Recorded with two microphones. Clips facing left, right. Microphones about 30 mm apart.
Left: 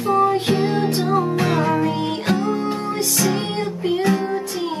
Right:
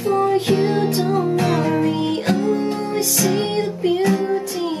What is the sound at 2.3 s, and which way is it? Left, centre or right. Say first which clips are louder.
Music: right 1 dB; centre.